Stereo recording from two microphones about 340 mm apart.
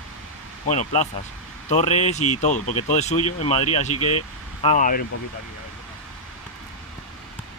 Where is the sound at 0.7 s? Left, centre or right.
Centre.